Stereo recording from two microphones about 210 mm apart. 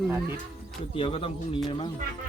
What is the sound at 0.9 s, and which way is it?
Speech, 25° left (ahead or behind).